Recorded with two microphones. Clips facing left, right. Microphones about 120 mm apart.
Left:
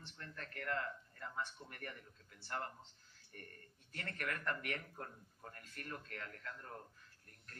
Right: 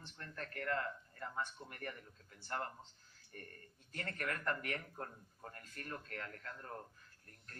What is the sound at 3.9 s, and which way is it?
A man's voice, 35° right (ahead or behind).